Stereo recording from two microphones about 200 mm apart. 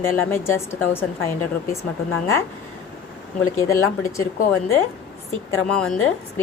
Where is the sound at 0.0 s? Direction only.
10° left (ahead or behind).